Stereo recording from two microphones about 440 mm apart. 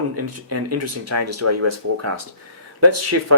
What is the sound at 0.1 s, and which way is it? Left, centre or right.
Speech, right.